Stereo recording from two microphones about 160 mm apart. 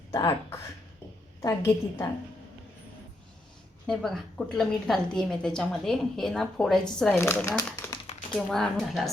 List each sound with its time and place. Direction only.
0.1 s a woman's voice: 20° left (ahead or behind)
3.8 s a woman's voice: 5° left (ahead or behind)
7.2 s speech: 15° left (ahead or behind)
8.4 s a woman's voice: 5° left (ahead or behind)